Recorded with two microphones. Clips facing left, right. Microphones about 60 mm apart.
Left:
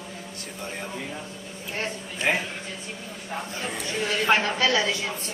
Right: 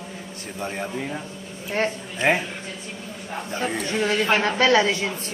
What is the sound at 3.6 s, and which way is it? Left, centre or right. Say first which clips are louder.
Speech: right 7 dB; right.